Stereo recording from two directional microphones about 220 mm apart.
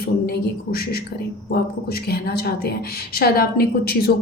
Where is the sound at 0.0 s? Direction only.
45° left (ahead or behind).